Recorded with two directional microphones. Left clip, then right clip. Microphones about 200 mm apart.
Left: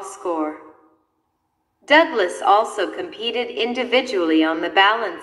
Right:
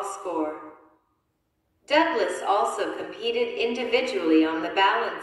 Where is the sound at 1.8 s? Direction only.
50° left (ahead or behind).